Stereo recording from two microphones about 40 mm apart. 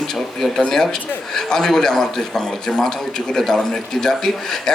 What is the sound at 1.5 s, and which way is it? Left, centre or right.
A man's voice, centre.